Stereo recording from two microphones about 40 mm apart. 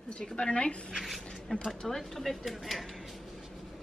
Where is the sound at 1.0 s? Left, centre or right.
Centre.